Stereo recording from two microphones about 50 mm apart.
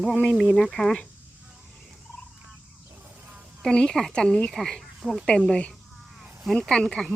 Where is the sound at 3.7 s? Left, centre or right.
Centre.